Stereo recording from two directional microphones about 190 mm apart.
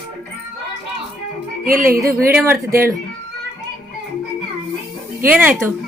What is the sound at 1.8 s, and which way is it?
Speech, 15° right (ahead or behind).